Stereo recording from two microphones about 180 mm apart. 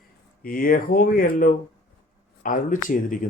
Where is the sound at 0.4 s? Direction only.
50° left (ahead or behind).